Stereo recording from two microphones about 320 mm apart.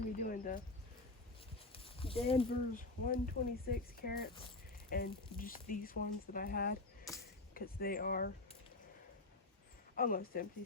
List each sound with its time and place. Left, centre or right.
0.0 s cricket: left
1.7 s speech: centre
10.0 s speech: left